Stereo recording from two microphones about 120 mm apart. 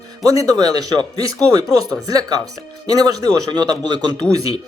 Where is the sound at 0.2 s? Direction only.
30° right (ahead or behind).